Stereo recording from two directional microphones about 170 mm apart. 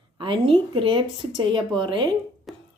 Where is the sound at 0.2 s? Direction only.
30° right (ahead or behind).